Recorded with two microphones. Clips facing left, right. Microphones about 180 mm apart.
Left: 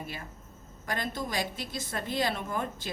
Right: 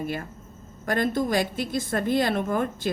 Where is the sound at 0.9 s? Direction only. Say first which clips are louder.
Right 10 dB; 50° right (ahead or behind).